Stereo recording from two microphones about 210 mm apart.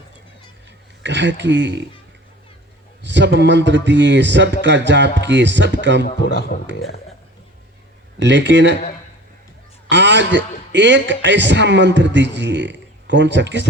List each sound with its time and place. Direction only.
1.0 s a man's voice: 55° right (ahead or behind)
3.0 s a man's voice: 60° right (ahead or behind)
6.1 s a man's voice: 50° left (ahead or behind)
8.2 s a man's voice: 60° right (ahead or behind)
9.9 s a man's voice: 60° right (ahead or behind)